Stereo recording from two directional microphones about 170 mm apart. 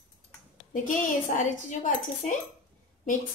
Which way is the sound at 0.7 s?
50° left (ahead or behind).